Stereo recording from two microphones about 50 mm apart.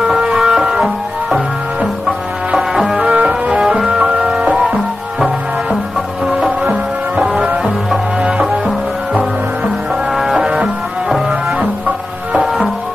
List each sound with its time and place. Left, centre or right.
0.0 s music: centre
3.0 s music: right
3.8 s music: centre
6.6 s music: right
10.3 s music: centre